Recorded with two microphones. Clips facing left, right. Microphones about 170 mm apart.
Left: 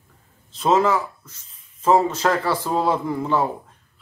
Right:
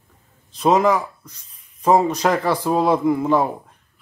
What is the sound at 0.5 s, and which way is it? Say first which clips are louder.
Speech: right 2 dB; 15° right (ahead or behind).